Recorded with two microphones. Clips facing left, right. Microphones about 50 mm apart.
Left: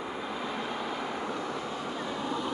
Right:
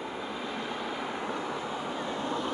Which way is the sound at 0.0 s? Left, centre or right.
Centre.